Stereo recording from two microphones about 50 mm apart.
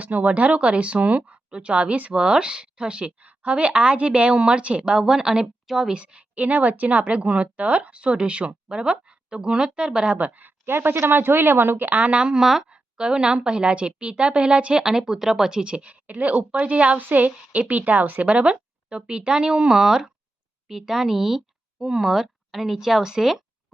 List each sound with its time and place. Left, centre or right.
0.0 s a woman's voice: right
1.5 s a woman's voice: centre
5.9 s a woman's voice: right
10.2 s speech: right
10.7 s a woman's voice: right
12.2 s a woman's voice: centre
17.0 s a woman's voice: right; by 23.4 s centre